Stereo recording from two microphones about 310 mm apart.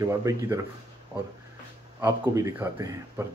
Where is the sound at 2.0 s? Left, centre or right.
Centre.